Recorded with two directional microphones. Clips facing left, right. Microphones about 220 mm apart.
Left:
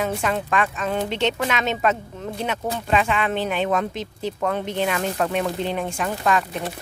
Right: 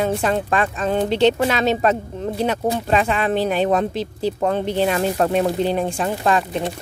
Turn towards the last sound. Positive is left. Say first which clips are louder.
# right 3 dB
turn(degrees=-30)  # may be behind; listen again after turning